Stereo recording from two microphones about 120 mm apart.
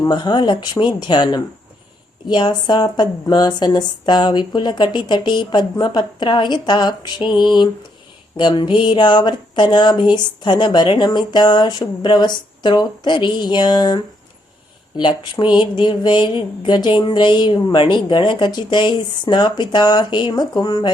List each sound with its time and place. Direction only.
0.0 s speech: 40° left (ahead or behind)